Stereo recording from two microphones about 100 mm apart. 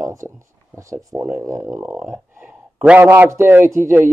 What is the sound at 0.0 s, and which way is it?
A man's voice, 30° right (ahead or behind).